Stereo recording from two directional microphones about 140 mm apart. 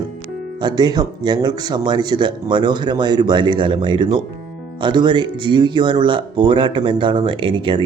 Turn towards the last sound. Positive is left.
turn(degrees=-35)  # may be behind; listen again after turning